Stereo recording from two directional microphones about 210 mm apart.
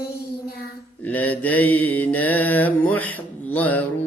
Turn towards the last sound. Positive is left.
turn(degrees=5)  # may be behind; listen again after turning